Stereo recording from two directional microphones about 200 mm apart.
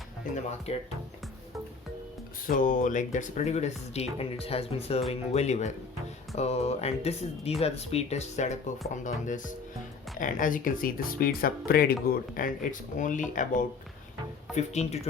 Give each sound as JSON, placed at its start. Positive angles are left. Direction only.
{"t": 0.7, "sound": "speech", "side_deg": 30}
{"t": 2.5, "sound": "speech", "side_deg": 40}